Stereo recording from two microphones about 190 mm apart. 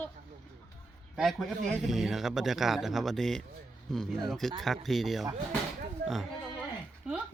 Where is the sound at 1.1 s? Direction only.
Centre (ahead or behind).